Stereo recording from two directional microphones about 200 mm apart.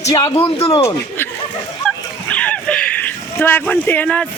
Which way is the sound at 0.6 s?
15° left (ahead or behind).